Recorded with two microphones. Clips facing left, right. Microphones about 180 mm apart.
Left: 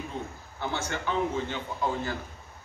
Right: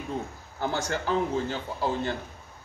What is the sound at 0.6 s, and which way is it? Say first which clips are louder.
A man's voice: right 3 dB; 40° right (ahead or behind).